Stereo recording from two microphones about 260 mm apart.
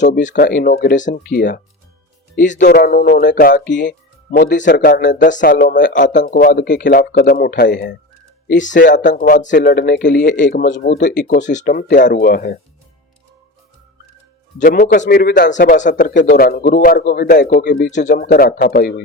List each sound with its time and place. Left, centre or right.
0.2 s a man's voice: left
8.8 s a man's voice: left
14.6 s a man's voice: left